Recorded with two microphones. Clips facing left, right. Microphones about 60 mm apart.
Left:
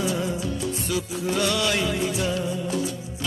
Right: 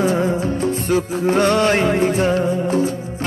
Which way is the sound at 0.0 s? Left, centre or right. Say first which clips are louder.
Right 8 dB; right.